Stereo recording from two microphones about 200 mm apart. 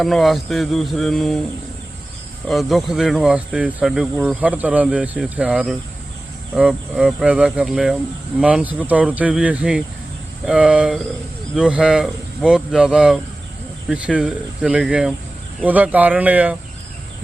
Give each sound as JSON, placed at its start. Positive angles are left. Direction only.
{"t": 0.0, "sound": "speech", "side_deg": 0}
{"t": 2.5, "sound": "speech", "side_deg": 0}